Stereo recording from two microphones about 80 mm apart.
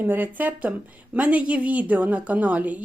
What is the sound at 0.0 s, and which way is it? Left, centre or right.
A woman's voice, right.